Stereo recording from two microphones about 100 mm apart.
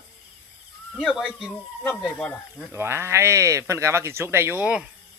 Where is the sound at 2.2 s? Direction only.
10° left (ahead or behind).